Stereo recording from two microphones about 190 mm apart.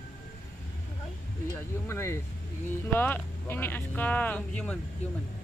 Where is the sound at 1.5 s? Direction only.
15° left (ahead or behind).